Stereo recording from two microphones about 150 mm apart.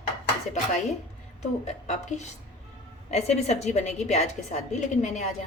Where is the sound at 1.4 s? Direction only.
50° left (ahead or behind).